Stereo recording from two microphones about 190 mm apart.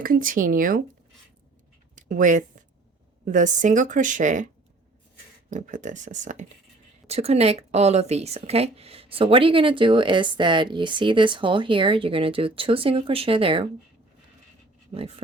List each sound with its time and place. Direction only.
0.0 s speech: 45° right (ahead or behind)
2.0 s a sound: 45° right (ahead or behind)
3.2 s speech: 40° right (ahead or behind)
5.5 s speech: 40° right (ahead or behind)
14.9 s speech: 30° right (ahead or behind)